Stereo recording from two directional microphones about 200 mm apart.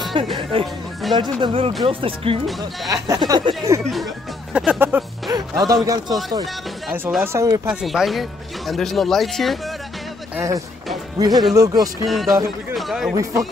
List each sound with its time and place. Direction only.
0.4 s speech: 30° right (ahead or behind)
1.0 s speech: centre (ahead or behind)
1.4 s speech: 25° right (ahead or behind)
3.8 s speech: centre (ahead or behind); by 5.8 s 20° right (ahead or behind)
6.9 s speech: 10° right (ahead or behind)
7.6 s speech: centre (ahead or behind)
10.3 s speech: 15° right (ahead or behind)
12.1 s a man's voice: centre (ahead or behind)
13.1 s speech: 15° right (ahead or behind)